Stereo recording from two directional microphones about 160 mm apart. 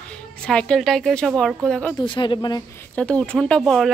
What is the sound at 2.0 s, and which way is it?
Speech, 30° left (ahead or behind).